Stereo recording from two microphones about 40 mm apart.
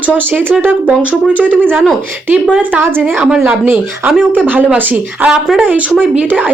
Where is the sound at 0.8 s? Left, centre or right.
Right.